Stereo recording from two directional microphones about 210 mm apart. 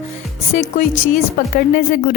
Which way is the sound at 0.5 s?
35° left (ahead or behind).